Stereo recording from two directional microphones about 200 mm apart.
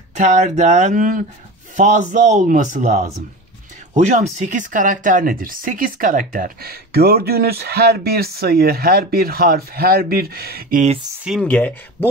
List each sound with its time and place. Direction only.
0.1 s speech: 40° right (ahead or behind)
11.4 s speech: 10° left (ahead or behind)